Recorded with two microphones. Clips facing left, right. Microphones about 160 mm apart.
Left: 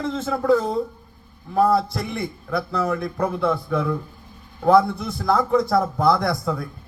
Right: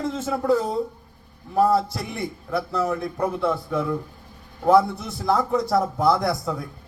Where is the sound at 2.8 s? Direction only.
20° right (ahead or behind).